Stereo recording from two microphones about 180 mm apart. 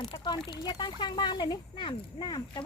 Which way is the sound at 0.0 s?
25° left (ahead or behind).